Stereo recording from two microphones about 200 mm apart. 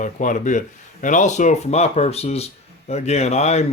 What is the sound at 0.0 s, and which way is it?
Speech, 40° left (ahead or behind).